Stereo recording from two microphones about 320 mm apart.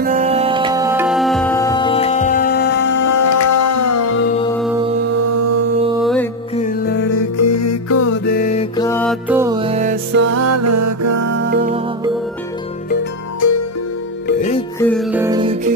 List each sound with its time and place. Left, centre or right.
0.0 s music: right; by 3.0 s left
3.0 s music: left
5.1 s music: right
6.5 s music: left
7.2 s music: left
8.3 s mantra: left
8.7 s music: centre
10.2 s music: right
11.2 s music: right
13.4 s music: left
14.2 s music: left
14.8 s music: centre